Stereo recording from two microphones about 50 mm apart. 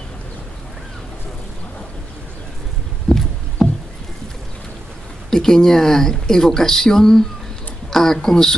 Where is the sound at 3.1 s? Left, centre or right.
Centre.